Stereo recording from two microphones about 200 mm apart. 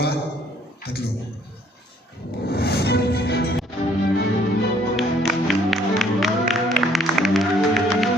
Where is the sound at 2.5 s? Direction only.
55° left (ahead or behind).